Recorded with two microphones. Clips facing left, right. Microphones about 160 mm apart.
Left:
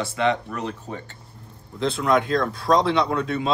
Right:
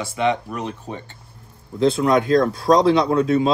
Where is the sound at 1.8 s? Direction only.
35° right (ahead or behind).